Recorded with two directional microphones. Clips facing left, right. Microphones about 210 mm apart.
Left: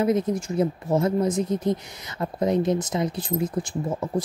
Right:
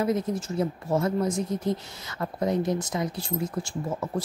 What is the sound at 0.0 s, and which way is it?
Speech, 15° left (ahead or behind).